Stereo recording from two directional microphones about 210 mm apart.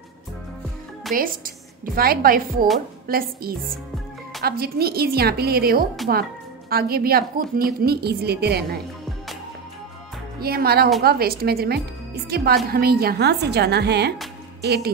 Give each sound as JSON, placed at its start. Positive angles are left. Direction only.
{"t": 1.1, "sound": "a woman's voice", "side_deg": -40}
{"t": 10.4, "sound": "a woman's voice", "side_deg": -45}